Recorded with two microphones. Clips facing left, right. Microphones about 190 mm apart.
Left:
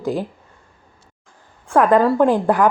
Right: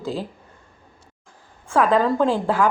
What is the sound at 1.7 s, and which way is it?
Speech, 15° left (ahead or behind).